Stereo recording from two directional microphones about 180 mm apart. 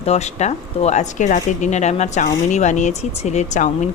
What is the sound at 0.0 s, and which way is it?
A woman's voice, 35° left (ahead or behind).